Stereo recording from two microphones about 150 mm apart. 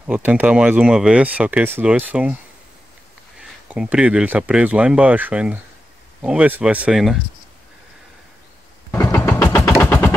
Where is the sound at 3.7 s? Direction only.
5° right (ahead or behind).